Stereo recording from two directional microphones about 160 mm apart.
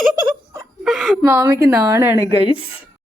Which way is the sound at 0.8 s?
Centre (ahead or behind).